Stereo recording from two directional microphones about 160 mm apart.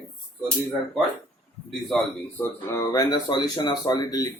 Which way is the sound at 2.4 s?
15° left (ahead or behind).